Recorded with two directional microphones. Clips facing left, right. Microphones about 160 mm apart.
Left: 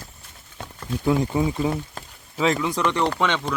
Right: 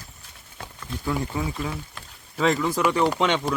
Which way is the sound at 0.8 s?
20° left (ahead or behind).